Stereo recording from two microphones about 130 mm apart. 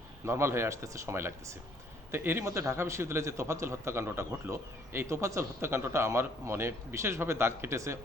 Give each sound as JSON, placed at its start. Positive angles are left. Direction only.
{"t": 0.3, "sound": "a man's voice", "side_deg": -20}